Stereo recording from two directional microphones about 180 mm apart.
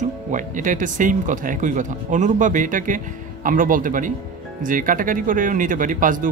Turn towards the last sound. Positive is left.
turn(degrees=-45)  # may be behind; listen again after turning